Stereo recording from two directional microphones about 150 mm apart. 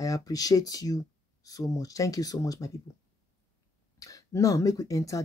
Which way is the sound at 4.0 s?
20° left (ahead or behind).